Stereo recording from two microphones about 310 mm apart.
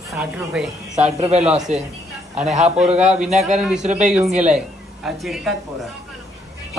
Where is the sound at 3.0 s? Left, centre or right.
Right.